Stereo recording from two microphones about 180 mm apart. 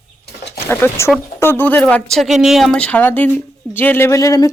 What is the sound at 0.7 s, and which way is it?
Speech, 15° left (ahead or behind).